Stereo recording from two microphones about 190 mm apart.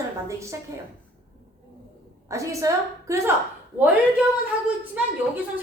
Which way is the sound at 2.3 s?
15° right (ahead or behind).